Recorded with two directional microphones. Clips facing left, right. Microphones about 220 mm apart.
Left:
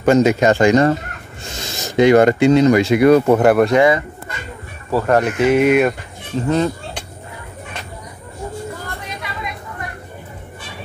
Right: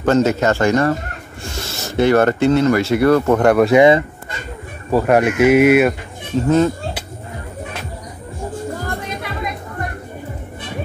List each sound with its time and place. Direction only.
0.0 s speech: 15° left (ahead or behind)
3.7 s speech: 20° right (ahead or behind)
4.9 s speech: 10° right (ahead or behind)
8.8 s music: 50° right (ahead or behind)